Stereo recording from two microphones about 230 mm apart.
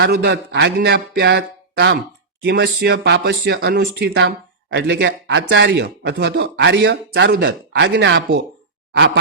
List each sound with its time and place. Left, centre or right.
0.0 s speech: right